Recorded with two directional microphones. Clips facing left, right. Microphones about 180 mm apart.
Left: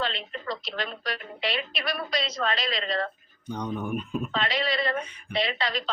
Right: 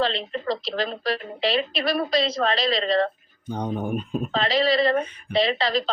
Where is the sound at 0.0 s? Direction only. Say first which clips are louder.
Right 7 dB; 35° right (ahead or behind).